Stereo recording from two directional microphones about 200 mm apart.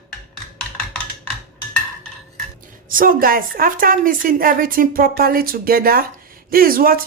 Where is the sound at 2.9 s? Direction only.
45° right (ahead or behind).